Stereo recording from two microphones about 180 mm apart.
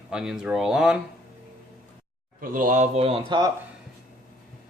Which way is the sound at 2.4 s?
50° right (ahead or behind).